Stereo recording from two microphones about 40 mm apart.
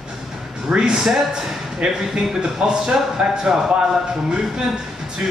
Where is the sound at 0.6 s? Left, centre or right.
Right.